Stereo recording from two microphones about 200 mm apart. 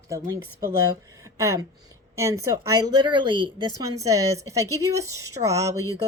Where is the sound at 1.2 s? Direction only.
15° right (ahead or behind).